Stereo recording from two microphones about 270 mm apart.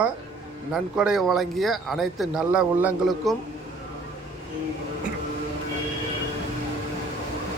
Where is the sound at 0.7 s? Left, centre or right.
Centre.